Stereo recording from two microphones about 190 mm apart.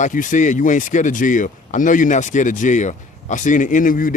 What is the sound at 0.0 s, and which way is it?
Speech, 45° left (ahead or behind).